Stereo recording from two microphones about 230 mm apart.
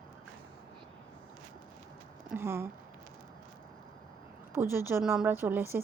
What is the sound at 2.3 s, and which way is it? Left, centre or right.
Speech, centre.